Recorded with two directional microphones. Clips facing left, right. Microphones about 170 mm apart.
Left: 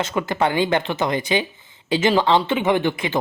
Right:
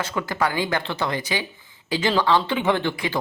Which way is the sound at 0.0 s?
20° left (ahead or behind).